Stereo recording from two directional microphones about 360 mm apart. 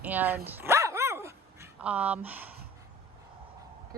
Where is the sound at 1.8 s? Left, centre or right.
Centre.